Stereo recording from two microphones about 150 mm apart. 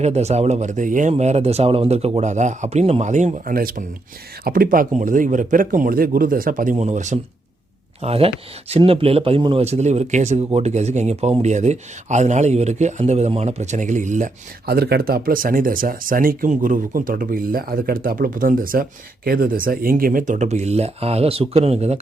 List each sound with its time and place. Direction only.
0.0 s speech: 45° right (ahead or behind)
1.1 s speech: 45° right (ahead or behind)
3.5 s speech: 75° right (ahead or behind)
4.9 s speech: 55° right (ahead or behind)
8.0 s speech: 40° right (ahead or behind)
14.7 s speech: 90° right; by 22.0 s 45° right (ahead or behind)